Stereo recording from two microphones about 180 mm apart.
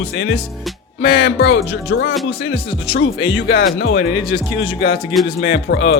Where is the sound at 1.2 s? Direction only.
75° left (ahead or behind).